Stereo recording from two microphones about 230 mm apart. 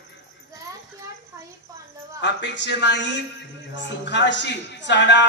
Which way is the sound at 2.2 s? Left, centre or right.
Left.